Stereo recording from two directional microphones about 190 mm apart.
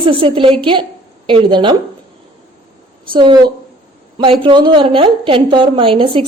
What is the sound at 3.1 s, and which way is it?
A woman's voice, 25° right (ahead or behind).